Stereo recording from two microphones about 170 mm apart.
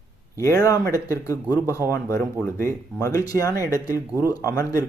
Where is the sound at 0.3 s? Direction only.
20° left (ahead or behind).